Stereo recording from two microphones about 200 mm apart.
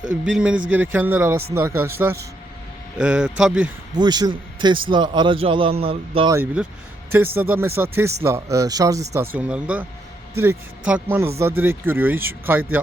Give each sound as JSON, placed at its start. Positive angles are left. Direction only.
{"t": 0.0, "sound": "a man's voice", "side_deg": -5}
{"t": 3.9, "sound": "speech", "side_deg": -20}
{"t": 6.3, "sound": "a man's voice", "side_deg": -10}
{"t": 10.8, "sound": "a man's voice", "side_deg": -10}